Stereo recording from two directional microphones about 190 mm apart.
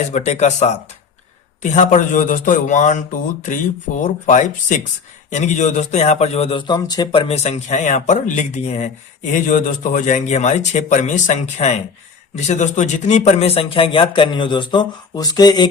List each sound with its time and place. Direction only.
0.1 s speech: 35° left (ahead or behind)
4.0 s speech: 40° left (ahead or behind); by 15.7 s 20° left (ahead or behind)